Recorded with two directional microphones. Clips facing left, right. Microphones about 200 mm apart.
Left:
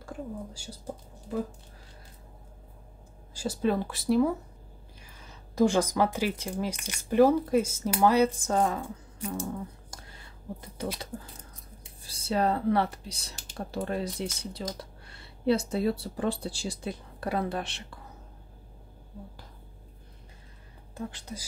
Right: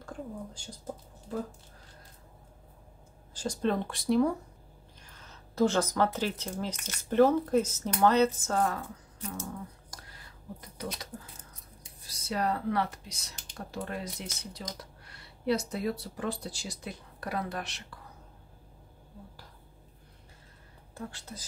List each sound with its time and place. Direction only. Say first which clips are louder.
0.0 s speech: left 2 dB; 10° left (ahead or behind)
3.3 s speech: left 2 dB; 5° left (ahead or behind)
9.8 s a sound: left 2 dB; 25° left (ahead or behind)
12.0 s speech: left 5 dB; 30° left (ahead or behind)
20.9 s speech: left 4 dB; 15° left (ahead or behind)